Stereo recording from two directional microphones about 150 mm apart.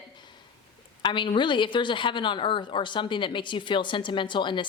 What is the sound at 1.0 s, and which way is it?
A woman's voice, 30° left (ahead or behind).